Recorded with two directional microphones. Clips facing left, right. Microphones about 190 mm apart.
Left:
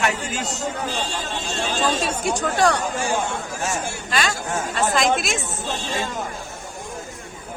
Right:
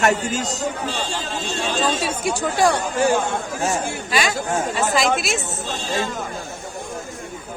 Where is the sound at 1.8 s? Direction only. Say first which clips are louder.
Even; 5° right (ahead or behind).